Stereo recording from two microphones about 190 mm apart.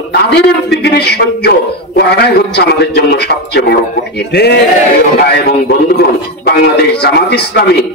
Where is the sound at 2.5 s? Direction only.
60° left (ahead or behind).